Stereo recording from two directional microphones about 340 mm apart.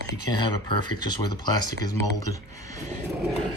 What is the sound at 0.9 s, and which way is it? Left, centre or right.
Speech, centre.